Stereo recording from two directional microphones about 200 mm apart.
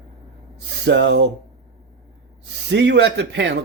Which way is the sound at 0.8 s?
60° right (ahead or behind).